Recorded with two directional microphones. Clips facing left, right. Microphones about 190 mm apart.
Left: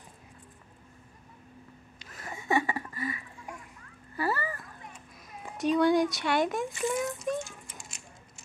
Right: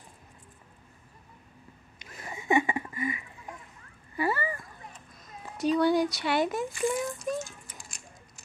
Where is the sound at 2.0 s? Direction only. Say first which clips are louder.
Right 1 dB; 15° right (ahead or behind).